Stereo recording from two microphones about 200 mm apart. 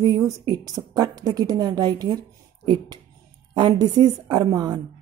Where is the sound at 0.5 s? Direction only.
20° right (ahead or behind).